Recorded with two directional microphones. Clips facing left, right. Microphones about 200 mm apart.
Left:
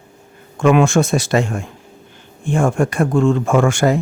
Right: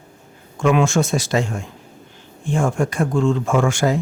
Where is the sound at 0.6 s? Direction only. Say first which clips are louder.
Left 4 dB; 55° left (ahead or behind).